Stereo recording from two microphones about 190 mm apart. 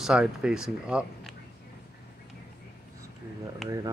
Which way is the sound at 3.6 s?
20° right (ahead or behind).